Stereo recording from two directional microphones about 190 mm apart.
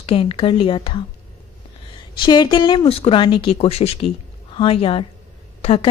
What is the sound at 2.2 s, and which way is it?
Speech, 25° left (ahead or behind).